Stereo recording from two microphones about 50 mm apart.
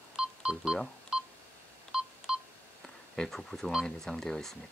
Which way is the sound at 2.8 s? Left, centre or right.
Centre.